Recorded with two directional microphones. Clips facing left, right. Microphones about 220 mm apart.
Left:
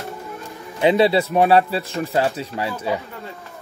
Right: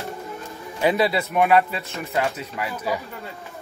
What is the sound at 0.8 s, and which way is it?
Speech, 25° left (ahead or behind).